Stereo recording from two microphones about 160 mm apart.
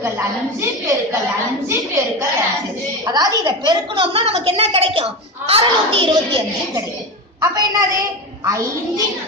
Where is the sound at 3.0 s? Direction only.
25° right (ahead or behind).